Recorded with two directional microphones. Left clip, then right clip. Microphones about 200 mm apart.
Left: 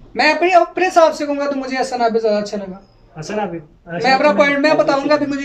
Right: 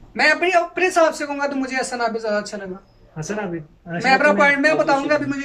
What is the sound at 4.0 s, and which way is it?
A man's voice, 20° left (ahead or behind).